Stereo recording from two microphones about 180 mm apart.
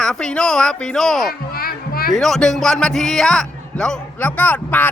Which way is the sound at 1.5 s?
55° left (ahead or behind).